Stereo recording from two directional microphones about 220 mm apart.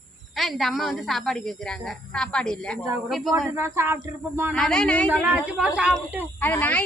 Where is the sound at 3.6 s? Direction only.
10° right (ahead or behind).